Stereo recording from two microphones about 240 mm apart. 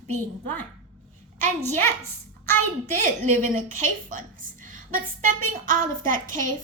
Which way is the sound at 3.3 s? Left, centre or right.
Right.